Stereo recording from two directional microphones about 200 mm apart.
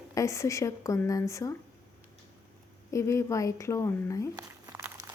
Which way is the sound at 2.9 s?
15° left (ahead or behind).